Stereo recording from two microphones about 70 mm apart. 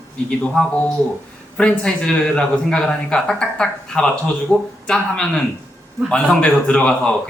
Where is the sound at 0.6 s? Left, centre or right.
Centre.